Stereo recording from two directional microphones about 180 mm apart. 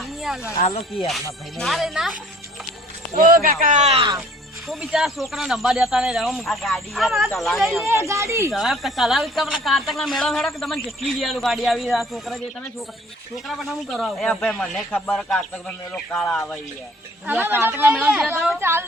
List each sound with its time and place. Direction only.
0.0 s a sound: centre (ahead or behind)
0.5 s speech: 35° left (ahead or behind)
1.0 s speech: centre (ahead or behind)
3.2 s speech: 50° right (ahead or behind); by 4.1 s 35° right (ahead or behind)
4.7 s speech: 5° right (ahead or behind)
7.9 s speech: 15° right (ahead or behind)
8.5 s speech: centre (ahead or behind)
13.5 s speech: centre (ahead or behind)
17.2 s speech: 10° right (ahead or behind)